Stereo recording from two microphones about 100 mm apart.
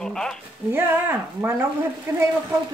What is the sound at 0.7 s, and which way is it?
Speech, 20° right (ahead or behind).